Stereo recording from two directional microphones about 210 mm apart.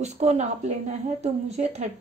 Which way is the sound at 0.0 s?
35° right (ahead or behind).